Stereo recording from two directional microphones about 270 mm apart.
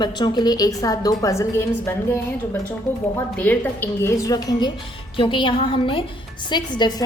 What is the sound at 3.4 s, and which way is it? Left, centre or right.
A woman's voice, centre.